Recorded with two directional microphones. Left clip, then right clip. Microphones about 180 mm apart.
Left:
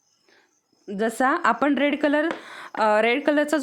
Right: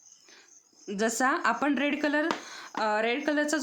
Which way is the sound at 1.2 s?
35° left (ahead or behind).